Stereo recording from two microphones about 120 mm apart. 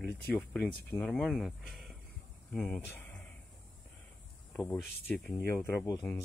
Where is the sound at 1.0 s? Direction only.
5° left (ahead or behind).